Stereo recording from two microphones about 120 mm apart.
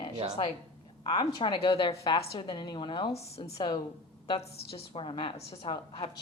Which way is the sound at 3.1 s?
60° left (ahead or behind).